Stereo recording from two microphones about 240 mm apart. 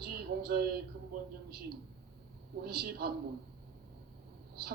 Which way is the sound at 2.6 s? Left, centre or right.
Right.